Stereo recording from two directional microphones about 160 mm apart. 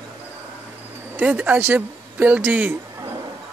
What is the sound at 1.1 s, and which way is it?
Speech, 10° right (ahead or behind).